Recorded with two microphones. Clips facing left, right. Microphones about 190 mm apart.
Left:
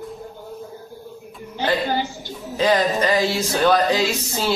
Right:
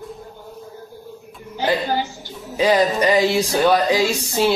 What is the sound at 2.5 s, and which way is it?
Speech, 15° right (ahead or behind).